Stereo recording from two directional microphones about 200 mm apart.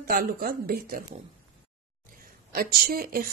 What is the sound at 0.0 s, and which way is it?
A woman's voice, 45° right (ahead or behind).